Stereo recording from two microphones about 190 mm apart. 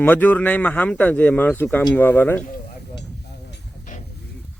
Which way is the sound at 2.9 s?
65° left (ahead or behind).